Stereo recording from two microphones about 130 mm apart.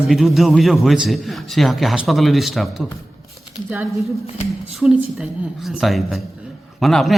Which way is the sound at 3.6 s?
20° right (ahead or behind).